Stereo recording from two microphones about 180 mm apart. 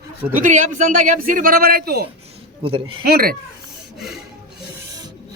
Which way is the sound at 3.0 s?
55° right (ahead or behind).